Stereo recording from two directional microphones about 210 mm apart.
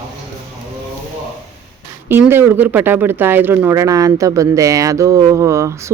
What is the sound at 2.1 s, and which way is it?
Speech, 10° right (ahead or behind).